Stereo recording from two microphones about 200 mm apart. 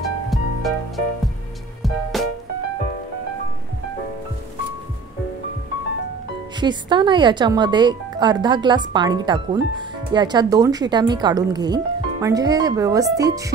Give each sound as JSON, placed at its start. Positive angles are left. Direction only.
{"t": 0.3, "sound": "music", "side_deg": 0}
{"t": 6.6, "sound": "speech", "side_deg": -25}